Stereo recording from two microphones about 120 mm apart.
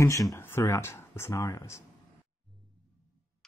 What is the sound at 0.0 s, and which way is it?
Speech, 25° left (ahead or behind).